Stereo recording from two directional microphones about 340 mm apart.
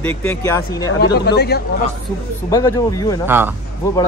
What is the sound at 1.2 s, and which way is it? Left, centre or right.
Speech, left.